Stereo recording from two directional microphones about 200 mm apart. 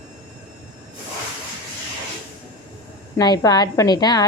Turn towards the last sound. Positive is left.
turn(degrees=20)  # may be behind; listen again after turning